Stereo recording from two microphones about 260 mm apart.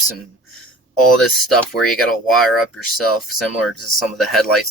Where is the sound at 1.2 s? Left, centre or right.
Centre.